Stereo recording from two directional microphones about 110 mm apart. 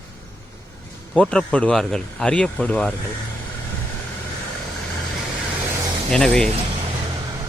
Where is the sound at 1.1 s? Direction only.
10° left (ahead or behind).